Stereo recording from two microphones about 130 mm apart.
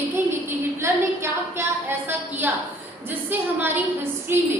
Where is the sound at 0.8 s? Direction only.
20° right (ahead or behind).